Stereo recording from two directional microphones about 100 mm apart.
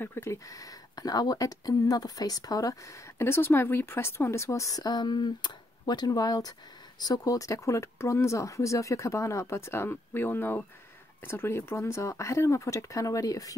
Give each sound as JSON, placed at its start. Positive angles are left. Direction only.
{"t": 0.0, "sound": "speech", "side_deg": 25}
{"t": 3.2, "sound": "speech", "side_deg": 25}